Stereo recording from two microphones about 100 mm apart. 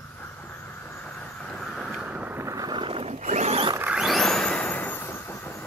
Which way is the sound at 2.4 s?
30° right (ahead or behind).